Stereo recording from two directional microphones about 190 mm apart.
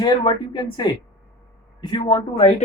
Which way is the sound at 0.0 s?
25° left (ahead or behind).